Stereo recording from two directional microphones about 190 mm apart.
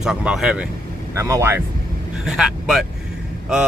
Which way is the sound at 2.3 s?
Centre (ahead or behind).